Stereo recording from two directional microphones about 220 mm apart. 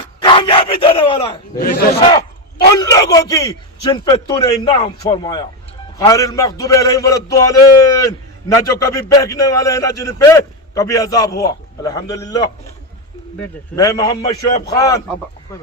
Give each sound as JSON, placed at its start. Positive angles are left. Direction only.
{"t": 0.2, "sound": "bow-wow", "side_deg": 20}
{"t": 1.5, "sound": "a man's voice", "side_deg": 40}
{"t": 2.7, "sound": "a man's voice", "side_deg": 15}